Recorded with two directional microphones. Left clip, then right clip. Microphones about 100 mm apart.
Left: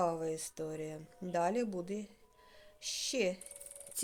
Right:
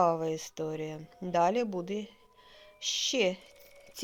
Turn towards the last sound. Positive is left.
turn(degrees=-25)  # may be behind; listen again after turning